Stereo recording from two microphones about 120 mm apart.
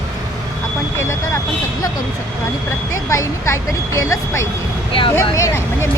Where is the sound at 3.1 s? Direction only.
25° left (ahead or behind).